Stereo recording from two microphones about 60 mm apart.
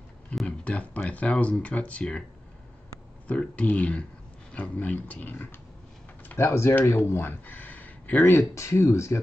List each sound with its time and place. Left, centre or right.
0.5 s speech: left
3.3 s speech: left
6.2 s speech: left
7.4 s speech: left